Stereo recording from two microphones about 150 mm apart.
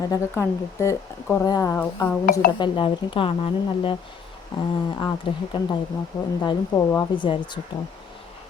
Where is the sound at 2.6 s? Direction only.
35° left (ahead or behind).